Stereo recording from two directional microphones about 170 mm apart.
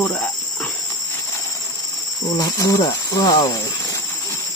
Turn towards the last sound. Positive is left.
turn(degrees=20)  # may be behind; listen again after turning